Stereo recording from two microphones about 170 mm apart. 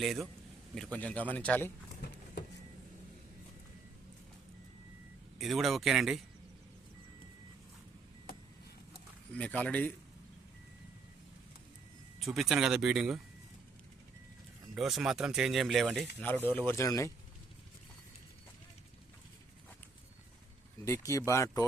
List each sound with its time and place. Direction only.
0.0 s speech: centre (ahead or behind)
5.4 s speech: centre (ahead or behind)
9.3 s speech: 10° left (ahead or behind)
12.2 s speech: centre (ahead or behind)
14.8 s speech: centre (ahead or behind)
16.2 s speech: 10° left (ahead or behind)
20.8 s speech: 15° left (ahead or behind)